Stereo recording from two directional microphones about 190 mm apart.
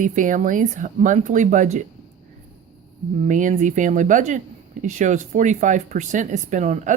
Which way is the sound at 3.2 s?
40° right (ahead or behind).